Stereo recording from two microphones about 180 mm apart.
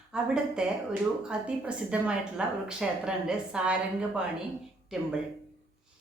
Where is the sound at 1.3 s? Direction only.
5° right (ahead or behind).